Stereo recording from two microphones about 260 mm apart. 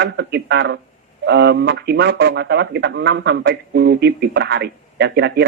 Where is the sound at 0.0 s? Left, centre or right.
Right.